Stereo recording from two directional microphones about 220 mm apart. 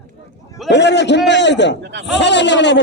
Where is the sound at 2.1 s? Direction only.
50° left (ahead or behind).